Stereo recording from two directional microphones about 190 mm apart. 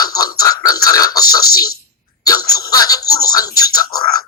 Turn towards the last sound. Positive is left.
turn(degrees=20)  # may be behind; listen again after turning